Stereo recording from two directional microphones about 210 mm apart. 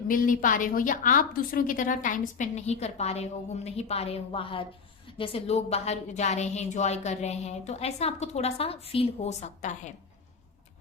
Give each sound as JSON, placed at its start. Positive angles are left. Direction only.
{"t": 0.1, "sound": "a woman's voice", "side_deg": 40}